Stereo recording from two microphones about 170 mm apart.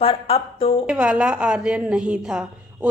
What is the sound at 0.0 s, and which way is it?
Speech, 35° left (ahead or behind).